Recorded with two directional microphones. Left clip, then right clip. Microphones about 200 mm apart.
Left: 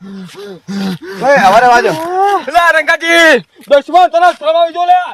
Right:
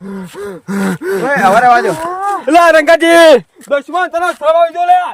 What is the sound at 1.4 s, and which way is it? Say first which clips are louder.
Speech: left 1 dB; 45° left (ahead or behind).